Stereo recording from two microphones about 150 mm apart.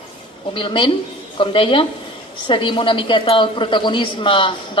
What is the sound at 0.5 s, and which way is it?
A woman's voice, 35° left (ahead or behind).